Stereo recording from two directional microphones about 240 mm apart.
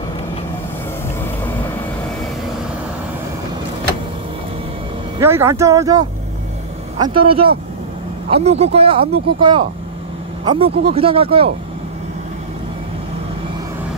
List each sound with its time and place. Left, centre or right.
5.2 s speech: centre